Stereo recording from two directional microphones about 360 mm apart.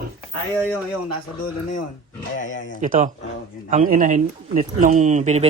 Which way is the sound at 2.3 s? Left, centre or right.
Left.